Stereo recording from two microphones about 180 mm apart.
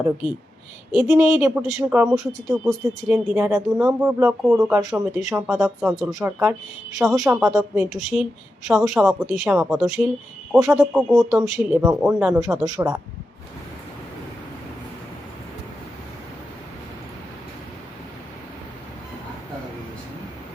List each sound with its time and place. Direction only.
0.9 s a woman's voice: 10° right (ahead or behind)
3.3 s a woman's voice: 10° right (ahead or behind)
4.5 s a woman's voice: 5° right (ahead or behind)
5.5 s a woman's voice: centre (ahead or behind)
10.5 s a woman's voice: 15° right (ahead or behind)
10.8 s speech: centre (ahead or behind)
11.5 s a woman's voice: 15° right (ahead or behind)